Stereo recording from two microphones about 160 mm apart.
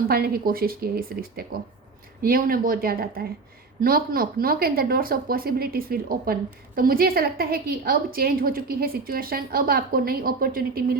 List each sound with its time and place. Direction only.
0.1 s a woman's voice: 70° right (ahead or behind)